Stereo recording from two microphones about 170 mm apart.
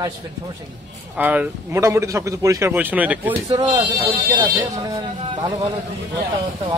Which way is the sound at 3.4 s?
25° right (ahead or behind).